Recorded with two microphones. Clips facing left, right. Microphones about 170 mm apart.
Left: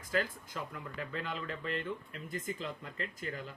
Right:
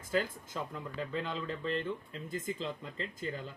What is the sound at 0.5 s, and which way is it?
Speech, 25° right (ahead or behind).